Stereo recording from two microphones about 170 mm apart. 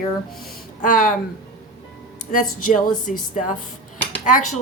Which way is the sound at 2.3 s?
50° left (ahead or behind).